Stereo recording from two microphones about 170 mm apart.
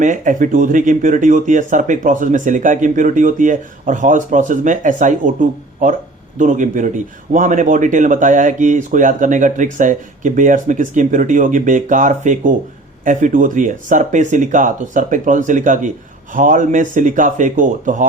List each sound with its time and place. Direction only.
0.0 s speech: 50° right (ahead or behind)